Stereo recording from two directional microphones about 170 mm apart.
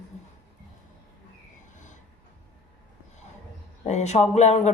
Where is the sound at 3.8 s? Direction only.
40° left (ahead or behind).